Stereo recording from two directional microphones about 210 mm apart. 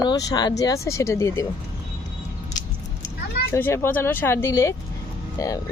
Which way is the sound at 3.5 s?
10° left (ahead or behind).